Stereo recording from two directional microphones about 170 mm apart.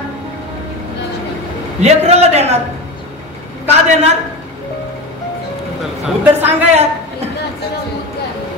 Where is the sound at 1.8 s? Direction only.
40° right (ahead or behind).